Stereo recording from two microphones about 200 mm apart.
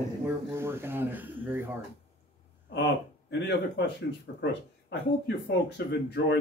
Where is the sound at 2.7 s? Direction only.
60° left (ahead or behind).